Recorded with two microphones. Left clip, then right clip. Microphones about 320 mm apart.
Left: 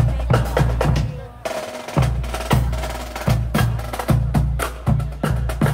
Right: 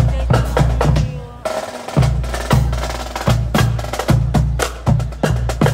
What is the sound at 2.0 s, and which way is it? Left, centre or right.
Music, centre.